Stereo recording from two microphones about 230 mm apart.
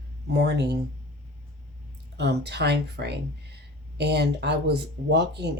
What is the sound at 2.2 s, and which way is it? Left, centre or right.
Speech, right.